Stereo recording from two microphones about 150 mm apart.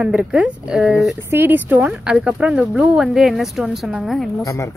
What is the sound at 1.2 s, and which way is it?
Speech, 15° right (ahead or behind).